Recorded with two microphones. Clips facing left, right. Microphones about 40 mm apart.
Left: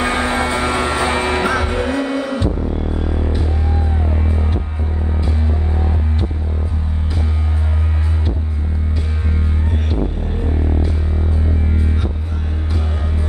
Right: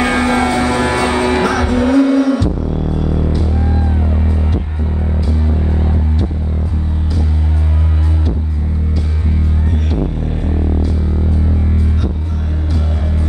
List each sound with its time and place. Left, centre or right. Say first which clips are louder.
0.1 s music: right 4 dB; left